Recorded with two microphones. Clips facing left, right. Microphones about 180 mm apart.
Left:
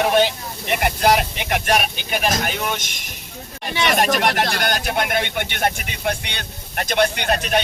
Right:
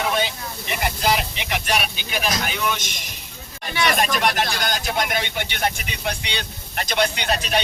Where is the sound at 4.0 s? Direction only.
50° left (ahead or behind).